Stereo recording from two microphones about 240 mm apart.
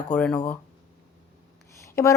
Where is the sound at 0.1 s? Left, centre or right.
Centre.